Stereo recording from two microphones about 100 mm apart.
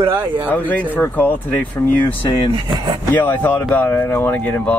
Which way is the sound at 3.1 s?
20° left (ahead or behind).